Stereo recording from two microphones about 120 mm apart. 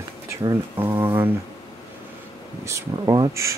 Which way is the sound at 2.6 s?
25° right (ahead or behind).